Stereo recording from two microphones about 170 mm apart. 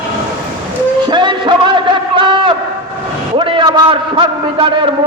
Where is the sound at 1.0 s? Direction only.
25° right (ahead or behind).